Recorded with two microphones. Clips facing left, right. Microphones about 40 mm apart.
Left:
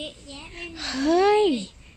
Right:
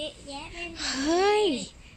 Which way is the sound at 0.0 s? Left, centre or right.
Left.